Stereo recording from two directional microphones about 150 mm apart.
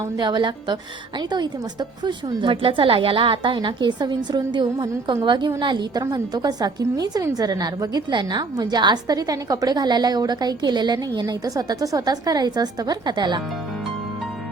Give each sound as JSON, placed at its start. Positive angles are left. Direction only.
{"t": 0.2, "sound": "a woman's voice", "side_deg": -30}